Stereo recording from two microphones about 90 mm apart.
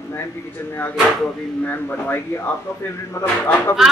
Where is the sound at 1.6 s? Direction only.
20° left (ahead or behind).